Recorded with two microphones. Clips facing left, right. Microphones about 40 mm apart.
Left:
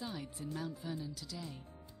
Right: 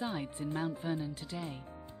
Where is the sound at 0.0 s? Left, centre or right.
Right.